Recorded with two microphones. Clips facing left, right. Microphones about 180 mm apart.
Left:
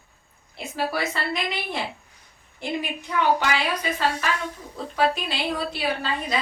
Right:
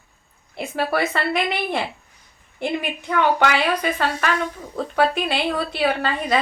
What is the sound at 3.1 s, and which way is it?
A woman's voice, 65° right (ahead or behind).